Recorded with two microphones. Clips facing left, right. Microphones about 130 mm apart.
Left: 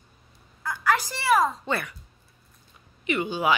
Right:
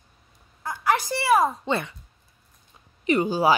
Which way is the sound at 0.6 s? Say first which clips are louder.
Right 1 dB; 20° right (ahead or behind).